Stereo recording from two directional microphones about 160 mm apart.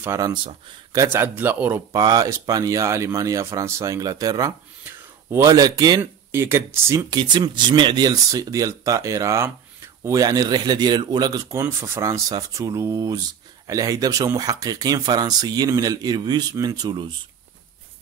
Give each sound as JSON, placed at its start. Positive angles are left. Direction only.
{"t": 0.0, "sound": "speech", "side_deg": -20}
{"t": 2.0, "sound": "speech", "side_deg": -25}